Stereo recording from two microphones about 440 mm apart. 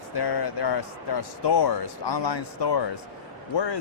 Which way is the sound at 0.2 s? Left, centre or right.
Left.